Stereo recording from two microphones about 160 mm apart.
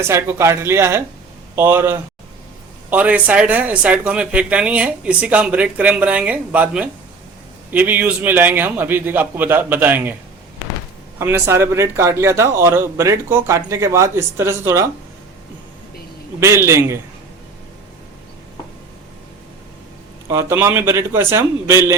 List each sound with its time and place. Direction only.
0.0 s speech: 15° right (ahead or behind)
11.2 s speech: 15° right (ahead or behind)
16.4 s speech: 15° right (ahead or behind)
20.2 s speech: 20° right (ahead or behind)